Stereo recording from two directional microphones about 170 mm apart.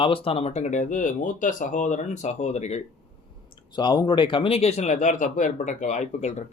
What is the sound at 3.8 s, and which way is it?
Speech, 25° left (ahead or behind).